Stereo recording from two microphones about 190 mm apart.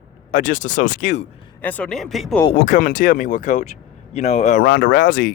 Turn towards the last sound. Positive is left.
turn(degrees=45)  # may be behind; listen again after turning